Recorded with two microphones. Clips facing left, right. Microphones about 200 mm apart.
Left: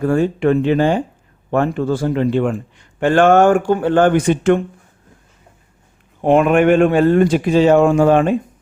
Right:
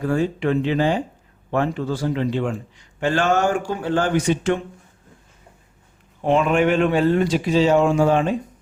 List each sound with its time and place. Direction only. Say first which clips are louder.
0.0 s a man's voice: left 6 dB; 50° left (ahead or behind)
6.2 s a man's voice: left 6 dB; 55° left (ahead or behind)